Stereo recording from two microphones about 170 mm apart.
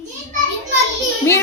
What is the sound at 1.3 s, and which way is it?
Speech, 15° left (ahead or behind).